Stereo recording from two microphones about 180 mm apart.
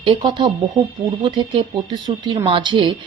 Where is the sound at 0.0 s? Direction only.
25° right (ahead or behind).